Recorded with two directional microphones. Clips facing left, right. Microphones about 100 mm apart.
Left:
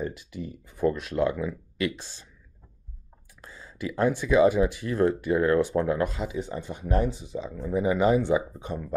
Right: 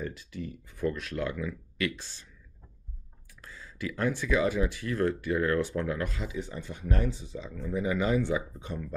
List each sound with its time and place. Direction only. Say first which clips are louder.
0.0 s speech: left 4 dB; 15° left (ahead or behind)
3.3 s speech: left 2 dB; 25° left (ahead or behind)